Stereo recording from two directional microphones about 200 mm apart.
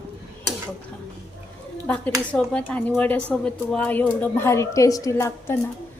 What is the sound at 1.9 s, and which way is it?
A woman's voice, 10° left (ahead or behind).